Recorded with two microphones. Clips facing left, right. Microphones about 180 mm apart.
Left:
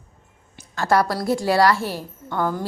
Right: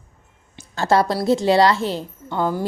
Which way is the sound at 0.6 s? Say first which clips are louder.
Right 2 dB; 25° right (ahead or behind).